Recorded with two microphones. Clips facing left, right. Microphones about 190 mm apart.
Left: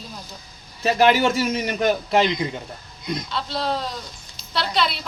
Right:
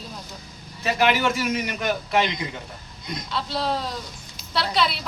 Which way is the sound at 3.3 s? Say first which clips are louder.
Right 2 dB; 5° right (ahead or behind).